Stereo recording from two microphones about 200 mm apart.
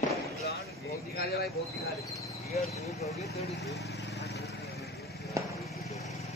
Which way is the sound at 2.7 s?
35° left (ahead or behind).